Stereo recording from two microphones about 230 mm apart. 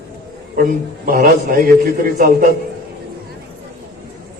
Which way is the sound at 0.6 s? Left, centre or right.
Right.